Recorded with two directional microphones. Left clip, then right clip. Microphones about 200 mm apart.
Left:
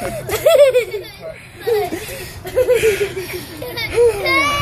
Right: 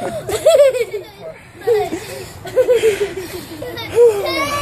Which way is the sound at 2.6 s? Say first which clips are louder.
Right 2 dB; centre (ahead or behind).